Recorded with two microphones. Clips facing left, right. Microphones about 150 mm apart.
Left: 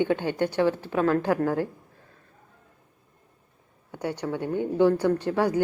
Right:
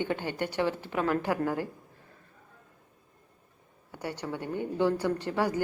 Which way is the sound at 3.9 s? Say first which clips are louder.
Left 6 dB; 15° left (ahead or behind).